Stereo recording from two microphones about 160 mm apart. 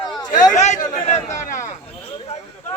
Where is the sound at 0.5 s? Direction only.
50° left (ahead or behind).